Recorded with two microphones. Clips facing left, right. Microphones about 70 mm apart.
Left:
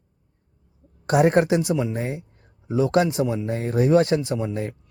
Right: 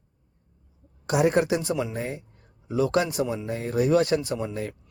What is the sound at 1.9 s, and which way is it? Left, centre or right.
A man's voice, left.